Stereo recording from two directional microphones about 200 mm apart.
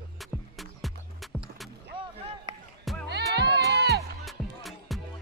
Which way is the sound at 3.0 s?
55° right (ahead or behind).